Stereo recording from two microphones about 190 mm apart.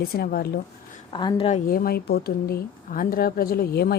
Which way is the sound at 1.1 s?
25° left (ahead or behind).